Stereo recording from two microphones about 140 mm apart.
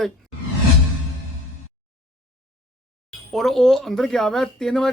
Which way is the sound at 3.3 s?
Centre (ahead or behind).